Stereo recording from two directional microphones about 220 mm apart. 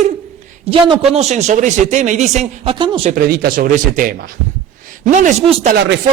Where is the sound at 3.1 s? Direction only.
45° right (ahead or behind).